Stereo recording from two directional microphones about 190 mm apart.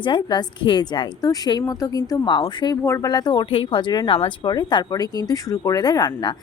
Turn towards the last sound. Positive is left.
turn(degrees=20)  # may be behind; listen again after turning